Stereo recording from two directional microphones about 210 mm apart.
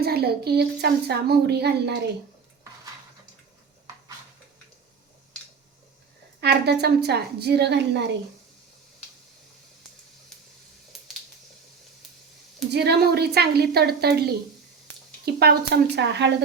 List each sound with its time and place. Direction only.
0.0 s speech: 50° right (ahead or behind)
6.4 s speech: 50° right (ahead or behind)
12.7 s speech: 50° right (ahead or behind)